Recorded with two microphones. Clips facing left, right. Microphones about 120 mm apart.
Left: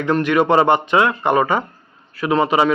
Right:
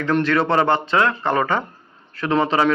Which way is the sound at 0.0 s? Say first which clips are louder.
Left 2 dB; 15° left (ahead or behind).